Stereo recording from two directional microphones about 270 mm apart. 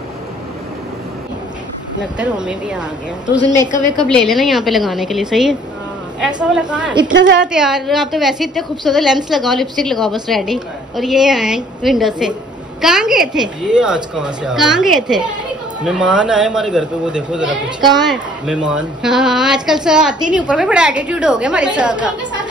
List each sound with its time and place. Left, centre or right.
2.1 s a woman's voice: centre
3.4 s a woman's voice: centre
4.3 s a woman's voice: centre
7.1 s a woman's voice: right
7.5 s a woman's voice: centre
17.7 s a woman's voice: centre
18.1 s a woman's voice: centre